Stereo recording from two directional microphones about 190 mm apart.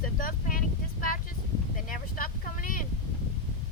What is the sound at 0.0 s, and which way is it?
Vehicle, 45° left (ahead or behind).